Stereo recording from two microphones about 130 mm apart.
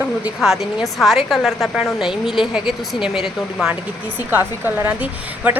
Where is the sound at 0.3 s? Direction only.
Centre (ahead or behind).